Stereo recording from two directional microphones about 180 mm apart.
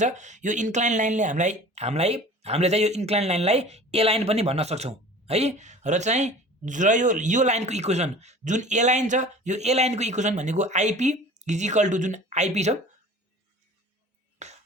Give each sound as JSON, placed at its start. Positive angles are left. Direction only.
{"t": 0.0, "sound": "speech", "side_deg": -40}
{"t": 14.3, "sound": "music", "side_deg": -40}